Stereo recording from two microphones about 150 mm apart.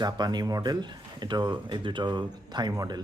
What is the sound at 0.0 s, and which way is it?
Speech, 30° right (ahead or behind).